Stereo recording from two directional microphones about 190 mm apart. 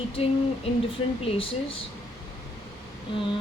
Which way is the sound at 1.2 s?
30° left (ahead or behind).